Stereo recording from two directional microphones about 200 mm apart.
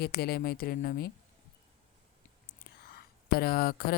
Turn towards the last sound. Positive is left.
turn(degrees=50)  # may be behind; listen again after turning